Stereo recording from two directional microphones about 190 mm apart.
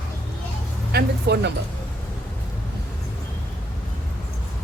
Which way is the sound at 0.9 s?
60° right (ahead or behind).